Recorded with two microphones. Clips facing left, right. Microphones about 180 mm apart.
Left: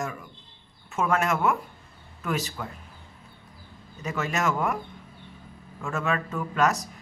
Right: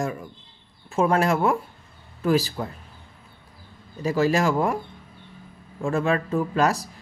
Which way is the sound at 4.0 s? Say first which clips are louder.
Right 7 dB; 35° right (ahead or behind).